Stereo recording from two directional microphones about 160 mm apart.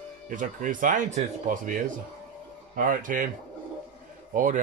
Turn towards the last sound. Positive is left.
turn(degrees=-50)  # may be behind; listen again after turning